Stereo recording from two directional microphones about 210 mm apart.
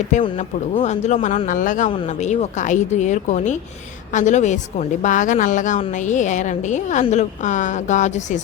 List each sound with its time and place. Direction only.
0.1 s a woman's voice: 35° left (ahead or behind)